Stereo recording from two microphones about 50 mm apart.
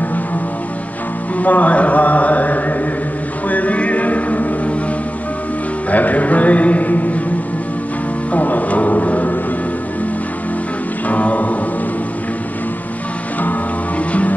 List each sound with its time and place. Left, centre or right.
1.4 s a sound: left
3.4 s music: left
5.9 s speech: left
8.3 s speech: left
11.1 s music: left
13.4 s music: left